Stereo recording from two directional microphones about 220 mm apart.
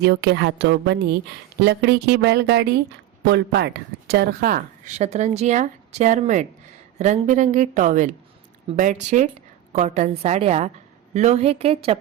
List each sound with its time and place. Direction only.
0.0 s a woman's voice: 50° right (ahead or behind); by 11.9 s 25° right (ahead or behind)